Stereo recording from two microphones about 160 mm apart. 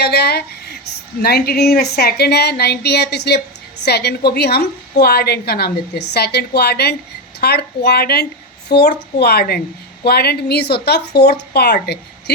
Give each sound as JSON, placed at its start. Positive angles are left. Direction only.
{"t": 0.0, "sound": "a woman's voice", "side_deg": 90}